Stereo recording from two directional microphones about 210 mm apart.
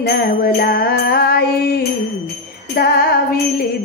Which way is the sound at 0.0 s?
45° left (ahead or behind).